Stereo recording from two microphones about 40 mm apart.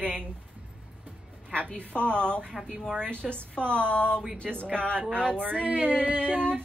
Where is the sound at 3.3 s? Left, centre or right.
Right.